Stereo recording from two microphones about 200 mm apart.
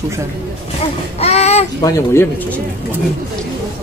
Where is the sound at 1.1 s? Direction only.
30° left (ahead or behind).